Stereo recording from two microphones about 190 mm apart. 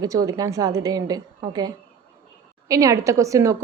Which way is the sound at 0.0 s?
20° right (ahead or behind).